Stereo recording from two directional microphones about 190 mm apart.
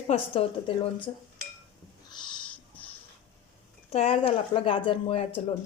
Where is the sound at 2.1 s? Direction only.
25° left (ahead or behind).